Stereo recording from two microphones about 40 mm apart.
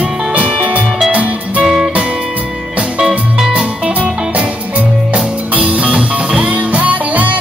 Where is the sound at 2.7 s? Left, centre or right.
Right.